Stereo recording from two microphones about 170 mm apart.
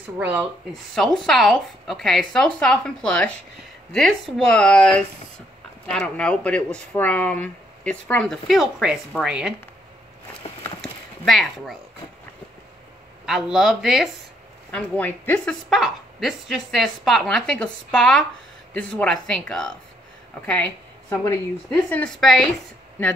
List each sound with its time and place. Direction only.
0.2 s speech: 10° right (ahead or behind)
0.9 s a woman's voice: 5° left (ahead or behind)
11.2 s a woman's voice: centre (ahead or behind)
13.2 s a woman's voice: 5° right (ahead or behind)
14.7 s a woman's voice: 10° left (ahead or behind)
21.1 s speech: 20° left (ahead or behind)
21.6 s a woman's voice: 10° left (ahead or behind)